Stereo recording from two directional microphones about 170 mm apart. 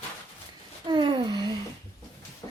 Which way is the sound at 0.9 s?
25° right (ahead or behind).